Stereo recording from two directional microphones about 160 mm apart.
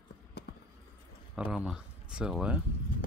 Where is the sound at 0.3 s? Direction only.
90° left.